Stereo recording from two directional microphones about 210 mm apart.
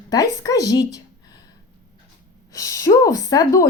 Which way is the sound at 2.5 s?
15° left (ahead or behind).